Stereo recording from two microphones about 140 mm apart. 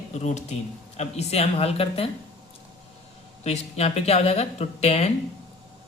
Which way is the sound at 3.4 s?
50° left (ahead or behind).